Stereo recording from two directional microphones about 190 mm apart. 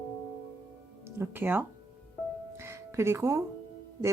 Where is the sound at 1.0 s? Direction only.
10° right (ahead or behind).